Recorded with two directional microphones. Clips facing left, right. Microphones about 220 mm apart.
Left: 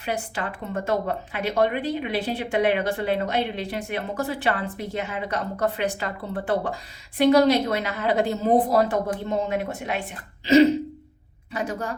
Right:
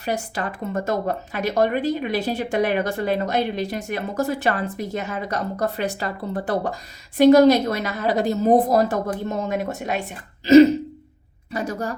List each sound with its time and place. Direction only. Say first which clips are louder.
0.0 s a woman's voice: right 3 dB; 40° right (ahead or behind)